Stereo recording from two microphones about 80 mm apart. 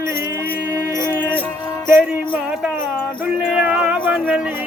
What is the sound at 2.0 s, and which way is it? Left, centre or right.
Music, centre.